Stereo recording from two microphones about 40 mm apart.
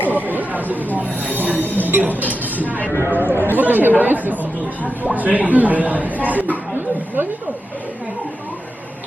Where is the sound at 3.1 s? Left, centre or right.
Right.